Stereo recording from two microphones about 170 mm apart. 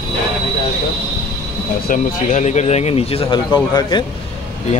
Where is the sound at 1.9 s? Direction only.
45° left (ahead or behind).